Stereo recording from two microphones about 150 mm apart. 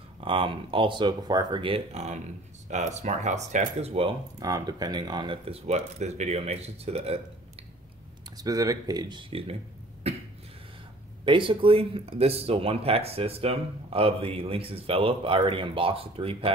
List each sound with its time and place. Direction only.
0.2 s speech: 35° right (ahead or behind)
4.4 s speech: 25° right (ahead or behind); by 7.2 s 45° right (ahead or behind)
8.4 s speech: 25° right (ahead or behind)
9.3 s speech: 40° right (ahead or behind)
10.1 s a sound: 40° right (ahead or behind)
11.2 s speech: 35° right (ahead or behind)